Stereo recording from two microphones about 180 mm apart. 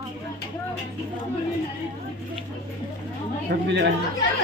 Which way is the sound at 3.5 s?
60° right (ahead or behind).